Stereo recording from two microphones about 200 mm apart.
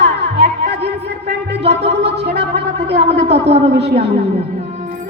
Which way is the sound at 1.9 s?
55° right (ahead or behind).